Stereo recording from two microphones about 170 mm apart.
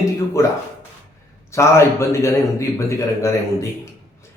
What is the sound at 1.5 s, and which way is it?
A man's voice, 15° left (ahead or behind).